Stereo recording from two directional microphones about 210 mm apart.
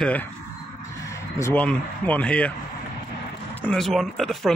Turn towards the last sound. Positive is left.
turn(degrees=0)  # may be behind; listen again after turning